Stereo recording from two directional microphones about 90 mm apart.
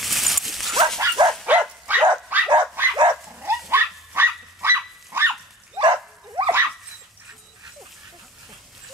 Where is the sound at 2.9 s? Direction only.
55° right (ahead or behind).